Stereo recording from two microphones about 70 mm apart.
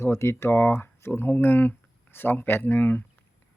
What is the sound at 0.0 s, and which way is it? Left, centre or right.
Speech, left.